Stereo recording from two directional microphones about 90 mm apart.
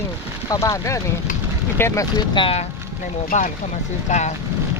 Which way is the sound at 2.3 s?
70° left (ahead or behind).